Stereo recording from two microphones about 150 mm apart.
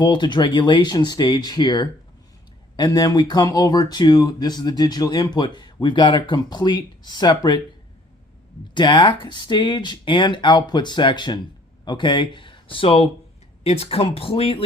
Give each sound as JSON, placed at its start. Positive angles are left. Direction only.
{"t": 0.0, "sound": "speech", "side_deg": 30}
{"t": 8.7, "sound": "speech", "side_deg": 30}